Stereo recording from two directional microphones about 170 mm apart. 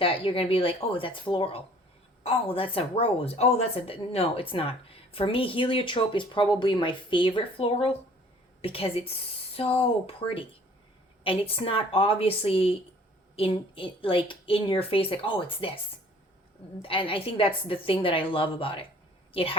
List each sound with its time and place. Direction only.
0.0 s a woman's voice: 30° left (ahead or behind)
16.8 s a woman's voice: 30° left (ahead or behind)